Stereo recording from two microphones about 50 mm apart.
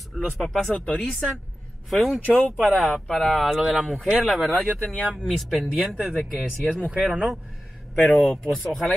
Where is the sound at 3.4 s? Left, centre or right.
Centre.